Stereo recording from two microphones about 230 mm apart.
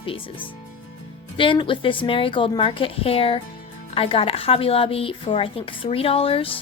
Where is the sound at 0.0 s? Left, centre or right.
Left.